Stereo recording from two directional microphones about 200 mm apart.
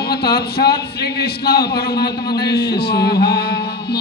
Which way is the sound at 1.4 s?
55° left (ahead or behind).